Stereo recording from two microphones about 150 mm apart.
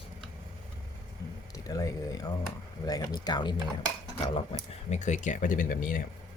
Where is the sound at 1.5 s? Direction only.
20° left (ahead or behind).